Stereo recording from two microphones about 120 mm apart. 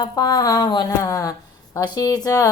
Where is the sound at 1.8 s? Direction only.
30° left (ahead or behind).